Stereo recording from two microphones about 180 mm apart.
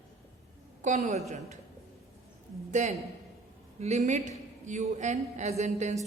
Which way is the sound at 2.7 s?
40° right (ahead or behind).